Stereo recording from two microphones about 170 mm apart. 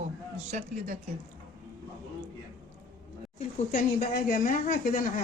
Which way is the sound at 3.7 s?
55° left (ahead or behind).